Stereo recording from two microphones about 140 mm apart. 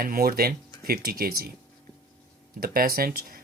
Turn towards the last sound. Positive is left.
turn(degrees=-90)